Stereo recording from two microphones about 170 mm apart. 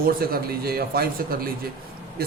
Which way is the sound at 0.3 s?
65° right (ahead or behind).